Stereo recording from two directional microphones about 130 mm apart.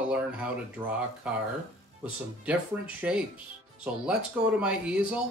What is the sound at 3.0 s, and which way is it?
Speech, 5° right (ahead or behind).